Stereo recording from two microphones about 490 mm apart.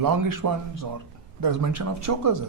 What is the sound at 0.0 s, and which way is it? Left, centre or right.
Speech, right.